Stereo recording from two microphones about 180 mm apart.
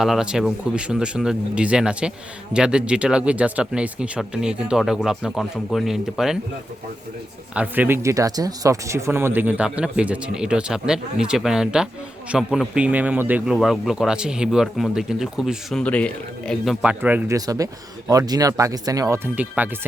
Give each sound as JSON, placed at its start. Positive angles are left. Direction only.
{"t": 0.0, "sound": "a man's voice", "side_deg": -5}
{"t": 7.5, "sound": "a man's voice", "side_deg": -10}
{"t": 16.8, "sound": "speech", "side_deg": -5}